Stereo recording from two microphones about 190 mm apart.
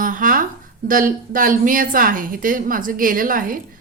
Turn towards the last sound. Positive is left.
turn(degrees=-45)  # may be behind; listen again after turning